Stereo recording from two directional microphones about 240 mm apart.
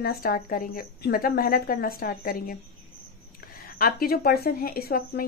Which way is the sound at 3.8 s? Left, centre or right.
Left.